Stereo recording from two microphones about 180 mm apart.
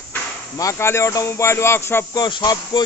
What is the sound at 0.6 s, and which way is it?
Speech, 15° left (ahead or behind).